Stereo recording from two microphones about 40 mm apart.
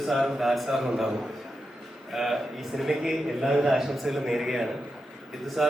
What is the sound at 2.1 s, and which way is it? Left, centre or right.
A man's voice, centre.